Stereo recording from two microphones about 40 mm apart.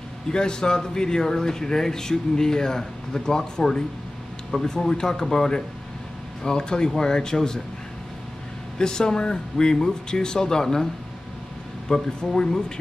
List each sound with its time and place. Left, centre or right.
0.3 s speech: centre
8.7 s speech: centre
11.9 s speech: centre